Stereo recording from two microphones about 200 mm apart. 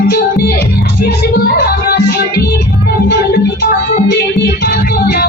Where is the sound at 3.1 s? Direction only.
55° left (ahead or behind).